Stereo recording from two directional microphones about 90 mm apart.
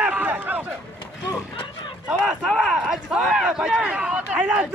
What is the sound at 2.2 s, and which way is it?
Speech, 5° left (ahead or behind).